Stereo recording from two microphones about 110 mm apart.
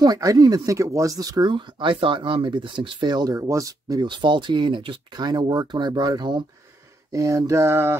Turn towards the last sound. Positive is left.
turn(degrees=-20)  # may be behind; listen again after turning